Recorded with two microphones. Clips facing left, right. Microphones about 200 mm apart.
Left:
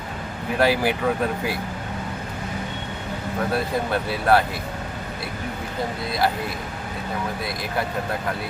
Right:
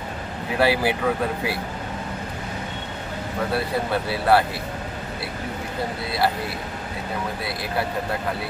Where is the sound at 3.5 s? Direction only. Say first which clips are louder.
Right 1 dB; 5° right (ahead or behind).